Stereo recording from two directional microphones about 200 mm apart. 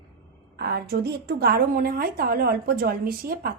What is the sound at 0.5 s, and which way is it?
A woman's voice, 55° right (ahead or behind).